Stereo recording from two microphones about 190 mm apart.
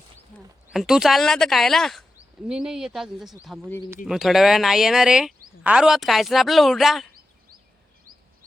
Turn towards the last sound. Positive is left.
turn(degrees=0)  # may be behind; listen again after turning